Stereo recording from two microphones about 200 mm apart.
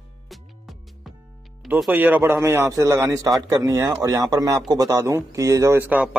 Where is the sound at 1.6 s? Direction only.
5° right (ahead or behind).